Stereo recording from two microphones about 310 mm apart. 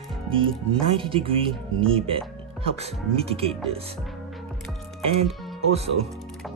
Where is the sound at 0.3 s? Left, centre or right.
Centre.